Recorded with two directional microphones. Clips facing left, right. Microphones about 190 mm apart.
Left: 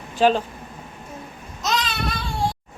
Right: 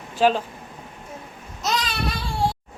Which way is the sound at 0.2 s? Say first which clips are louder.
Left 1 dB; 5° right (ahead or behind).